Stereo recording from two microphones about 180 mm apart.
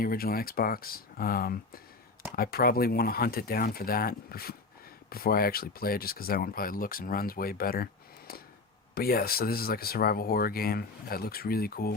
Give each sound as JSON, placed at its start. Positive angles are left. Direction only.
{"t": 0.0, "sound": "speech", "side_deg": 55}
{"t": 8.3, "sound": "a sound", "side_deg": 55}
{"t": 9.0, "sound": "speech", "side_deg": 55}